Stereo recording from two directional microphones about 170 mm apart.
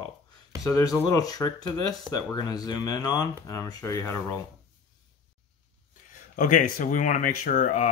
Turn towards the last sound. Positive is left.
turn(degrees=50)  # may be behind; listen again after turning